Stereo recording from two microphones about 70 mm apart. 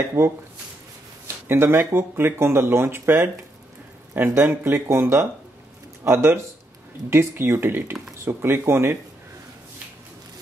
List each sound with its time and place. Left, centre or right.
0.2 s speech: right